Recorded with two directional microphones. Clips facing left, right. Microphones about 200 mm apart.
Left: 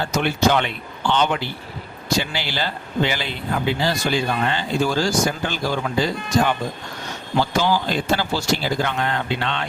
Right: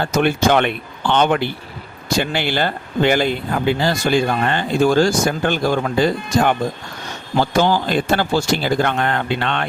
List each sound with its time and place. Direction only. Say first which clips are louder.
0.0 s speech: right 3 dB; 55° right (ahead or behind)